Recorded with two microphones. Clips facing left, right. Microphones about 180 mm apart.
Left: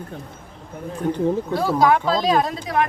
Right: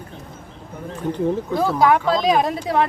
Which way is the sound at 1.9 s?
20° right (ahead or behind).